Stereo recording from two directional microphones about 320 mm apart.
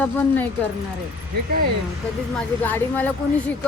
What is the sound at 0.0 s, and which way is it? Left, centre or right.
Speech, centre.